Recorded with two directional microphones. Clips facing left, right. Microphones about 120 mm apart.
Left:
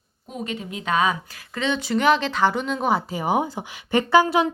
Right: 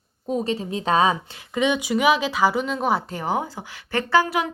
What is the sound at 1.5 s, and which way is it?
Speech, 15° right (ahead or behind).